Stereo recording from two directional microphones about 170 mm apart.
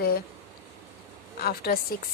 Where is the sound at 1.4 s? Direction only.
65° left (ahead or behind).